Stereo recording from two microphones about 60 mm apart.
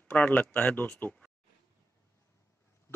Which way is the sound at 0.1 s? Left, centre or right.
Left.